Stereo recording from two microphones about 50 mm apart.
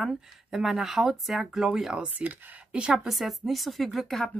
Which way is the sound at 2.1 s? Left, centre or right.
Right.